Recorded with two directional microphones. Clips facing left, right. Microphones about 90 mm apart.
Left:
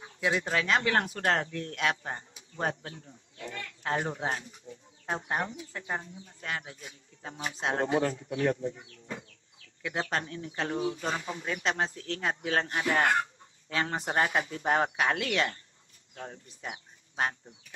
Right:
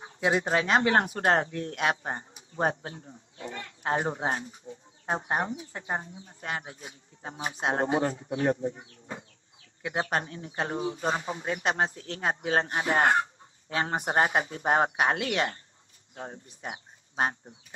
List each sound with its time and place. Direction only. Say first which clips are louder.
0.0 s speech: right 3 dB; 25° right (ahead or behind)